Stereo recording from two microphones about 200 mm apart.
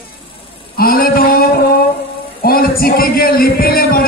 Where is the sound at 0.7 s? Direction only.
45° left (ahead or behind).